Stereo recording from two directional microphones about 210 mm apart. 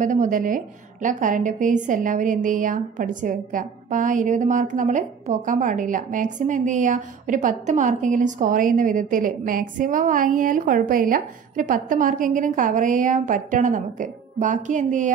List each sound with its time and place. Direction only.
0.0 s a woman's voice: 40° right (ahead or behind)